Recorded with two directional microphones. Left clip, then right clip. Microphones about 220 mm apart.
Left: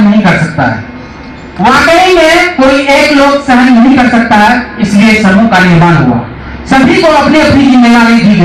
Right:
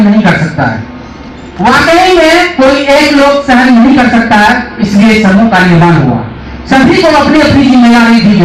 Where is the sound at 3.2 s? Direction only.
50° left (ahead or behind).